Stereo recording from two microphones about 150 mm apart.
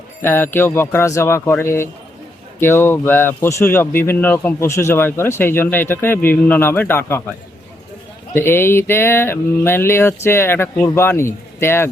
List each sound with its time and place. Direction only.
0.2 s a man's voice: 15° left (ahead or behind)
8.4 s a man's voice: 15° left (ahead or behind)